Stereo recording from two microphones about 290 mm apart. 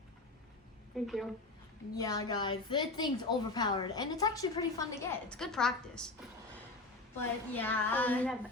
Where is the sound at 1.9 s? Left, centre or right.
Centre.